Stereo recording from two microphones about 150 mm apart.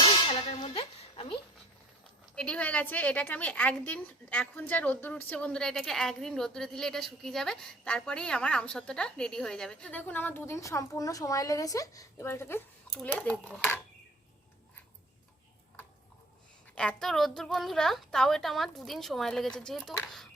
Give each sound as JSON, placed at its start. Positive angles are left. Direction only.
{"t": 0.0, "sound": "clang", "side_deg": 35}
{"t": 2.3, "sound": "a woman's voice", "side_deg": 5}
{"t": 16.7, "sound": "a woman's voice", "side_deg": 5}